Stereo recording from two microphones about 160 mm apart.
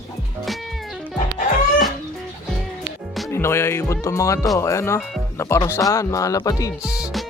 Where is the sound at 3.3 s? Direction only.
15° left (ahead or behind).